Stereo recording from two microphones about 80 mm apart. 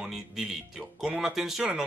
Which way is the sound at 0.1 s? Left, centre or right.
Centre.